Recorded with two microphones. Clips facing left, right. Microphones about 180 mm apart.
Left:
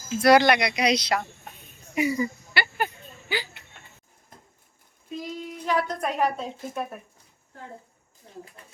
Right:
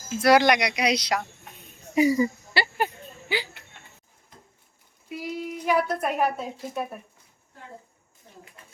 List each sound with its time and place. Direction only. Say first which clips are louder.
0.2 s speech: left 1 dB; 10° right (ahead or behind)
2.0 s a sound: right 4 dB; 35° right (ahead or behind)
5.0 s a woman's voice: right 2 dB; 10° right (ahead or behind)